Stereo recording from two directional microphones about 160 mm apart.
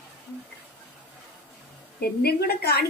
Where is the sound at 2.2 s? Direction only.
75° left (ahead or behind).